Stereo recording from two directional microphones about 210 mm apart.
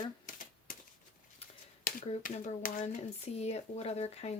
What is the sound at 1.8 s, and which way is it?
Speech, 35° left (ahead or behind).